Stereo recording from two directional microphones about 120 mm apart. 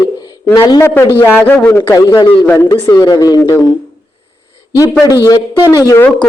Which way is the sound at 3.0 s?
35° left (ahead or behind).